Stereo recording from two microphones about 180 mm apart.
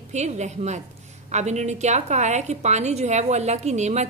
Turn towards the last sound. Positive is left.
turn(degrees=-40)  # may be behind; listen again after turning